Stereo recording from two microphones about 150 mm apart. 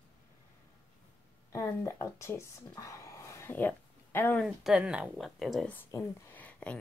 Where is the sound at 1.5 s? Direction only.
20° left (ahead or behind).